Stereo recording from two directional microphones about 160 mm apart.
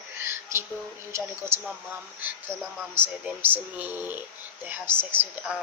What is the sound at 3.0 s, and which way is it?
A woman's voice, 10° right (ahead or behind).